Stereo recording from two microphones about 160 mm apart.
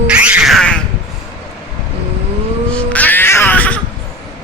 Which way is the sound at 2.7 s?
10° left (ahead or behind).